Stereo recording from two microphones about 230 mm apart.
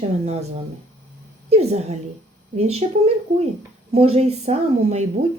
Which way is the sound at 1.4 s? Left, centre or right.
Right.